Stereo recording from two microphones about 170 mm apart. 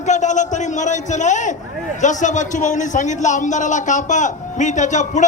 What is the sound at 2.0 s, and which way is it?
A man's voice, 45° left (ahead or behind).